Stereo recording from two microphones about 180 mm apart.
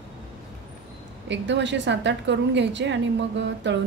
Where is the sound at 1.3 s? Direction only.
85° right.